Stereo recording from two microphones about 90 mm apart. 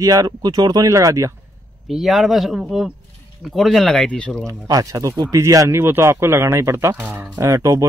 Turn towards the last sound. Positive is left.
turn(degrees=-40)  # may be behind; listen again after turning